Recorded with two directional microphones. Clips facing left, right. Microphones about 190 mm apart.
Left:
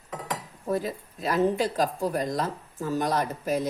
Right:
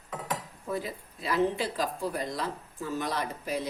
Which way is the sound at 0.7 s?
40° left (ahead or behind).